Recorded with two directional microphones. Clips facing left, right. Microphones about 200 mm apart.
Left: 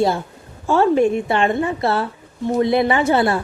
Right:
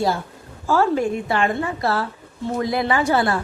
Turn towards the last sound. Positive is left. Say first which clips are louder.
# left 3 dB
turn(degrees=25)  # may be behind; listen again after turning